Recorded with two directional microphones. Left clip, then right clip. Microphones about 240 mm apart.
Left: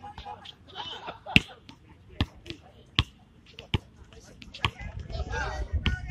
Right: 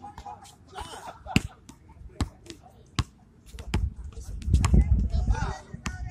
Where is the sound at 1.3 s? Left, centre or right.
Right.